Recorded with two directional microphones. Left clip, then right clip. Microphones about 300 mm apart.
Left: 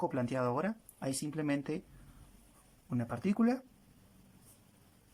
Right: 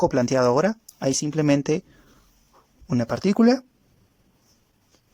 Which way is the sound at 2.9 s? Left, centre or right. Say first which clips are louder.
Right 14 dB; right.